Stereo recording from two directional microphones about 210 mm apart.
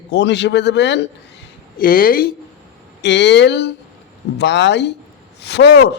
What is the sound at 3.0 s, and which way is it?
A man's voice, 55° left (ahead or behind).